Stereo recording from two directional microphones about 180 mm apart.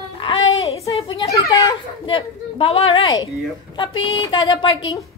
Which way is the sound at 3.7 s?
25° left (ahead or behind).